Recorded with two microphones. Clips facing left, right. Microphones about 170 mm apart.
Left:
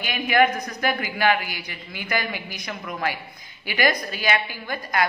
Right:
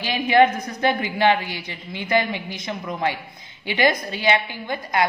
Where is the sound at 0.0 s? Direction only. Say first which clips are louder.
Right 3 dB; 25° right (ahead or behind).